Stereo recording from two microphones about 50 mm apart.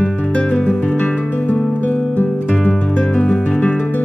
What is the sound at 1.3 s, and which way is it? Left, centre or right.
Music, left.